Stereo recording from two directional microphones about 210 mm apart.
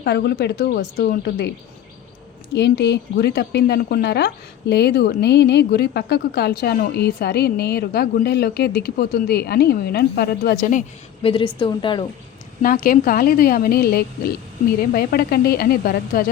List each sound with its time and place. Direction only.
0.0 s speech: 50° left (ahead or behind)
2.6 s speech: 50° left (ahead or behind)
11.2 s a woman's voice: 25° left (ahead or behind)
12.6 s speech: 40° left (ahead or behind)